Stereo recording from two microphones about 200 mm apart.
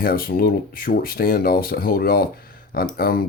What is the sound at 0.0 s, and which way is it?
Speech, 45° left (ahead or behind).